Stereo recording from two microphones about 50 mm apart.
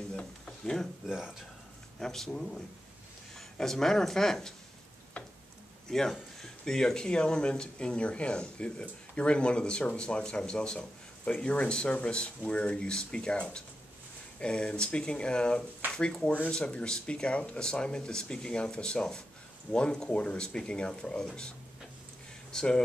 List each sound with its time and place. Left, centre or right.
1.0 s speech: centre
2.0 s speech: centre
5.2 s tick-tock: left
5.9 s speech: centre
22.5 s speech: centre